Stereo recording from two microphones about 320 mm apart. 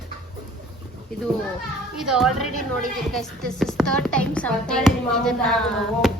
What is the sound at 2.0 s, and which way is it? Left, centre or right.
A woman's voice, centre.